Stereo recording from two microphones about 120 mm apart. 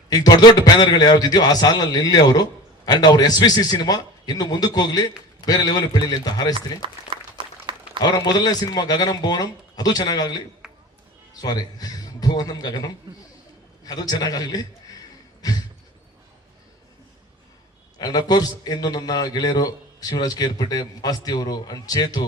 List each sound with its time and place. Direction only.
0.1 s a man's voice: 35° left (ahead or behind)
6.8 s a sound: 45° right (ahead or behind)
8.0 s a man's voice: 35° left (ahead or behind)
10.6 s a sound: 5° right (ahead or behind)
11.3 s a man's voice: 35° left (ahead or behind)
17.9 s a man's voice: 35° left (ahead or behind)